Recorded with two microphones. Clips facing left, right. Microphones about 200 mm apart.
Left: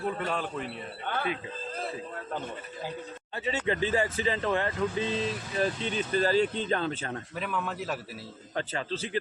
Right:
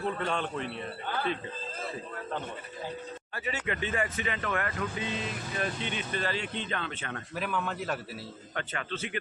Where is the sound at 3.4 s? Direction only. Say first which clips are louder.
Left 5 dB; 30° left (ahead or behind).